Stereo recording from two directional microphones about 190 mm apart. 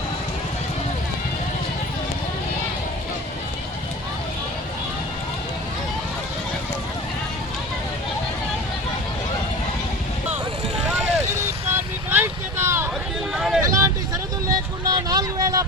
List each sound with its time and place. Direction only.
11.7 s vehicle: 10° right (ahead or behind)
13.3 s vehicle: centre (ahead or behind)
13.6 s vehicle: 20° right (ahead or behind)